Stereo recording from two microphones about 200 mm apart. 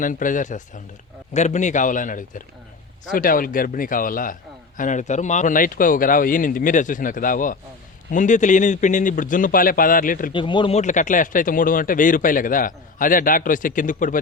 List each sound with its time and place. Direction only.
0.0 s speech: 40° left (ahead or behind)
10.3 s speech: 25° left (ahead or behind); by 14.2 s 40° left (ahead or behind)